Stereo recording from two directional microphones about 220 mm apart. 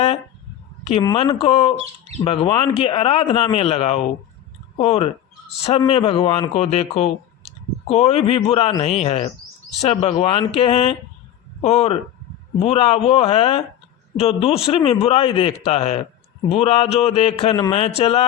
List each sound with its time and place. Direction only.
1.0 s speech: 25° left (ahead or behind)